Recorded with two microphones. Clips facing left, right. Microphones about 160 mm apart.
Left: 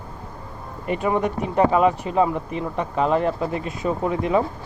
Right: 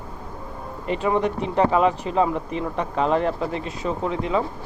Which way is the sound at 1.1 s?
10° left (ahead or behind).